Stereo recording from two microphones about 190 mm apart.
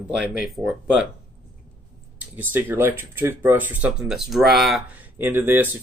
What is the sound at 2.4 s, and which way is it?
Speech, 10° right (ahead or behind).